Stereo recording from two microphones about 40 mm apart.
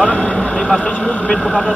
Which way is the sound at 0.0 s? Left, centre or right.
Left.